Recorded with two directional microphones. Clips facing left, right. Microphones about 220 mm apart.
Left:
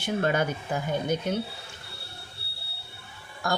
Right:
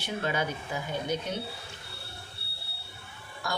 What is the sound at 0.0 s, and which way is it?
Speech, 50° left (ahead or behind).